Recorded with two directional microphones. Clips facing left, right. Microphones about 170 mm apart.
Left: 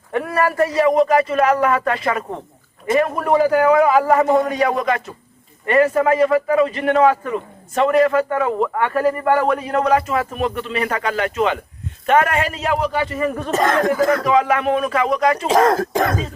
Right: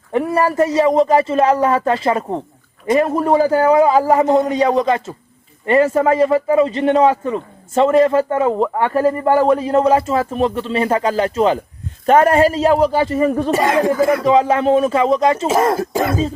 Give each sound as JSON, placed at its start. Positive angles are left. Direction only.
{"t": 0.1, "sound": "a man's voice", "side_deg": -25}
{"t": 13.5, "sound": "speech", "side_deg": -10}
{"t": 14.3, "sound": "a man's voice", "side_deg": -25}
{"t": 15.4, "sound": "speech", "side_deg": -5}